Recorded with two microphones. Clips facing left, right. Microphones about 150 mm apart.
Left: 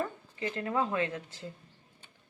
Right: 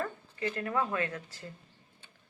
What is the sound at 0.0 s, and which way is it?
Speech, 20° left (ahead or behind).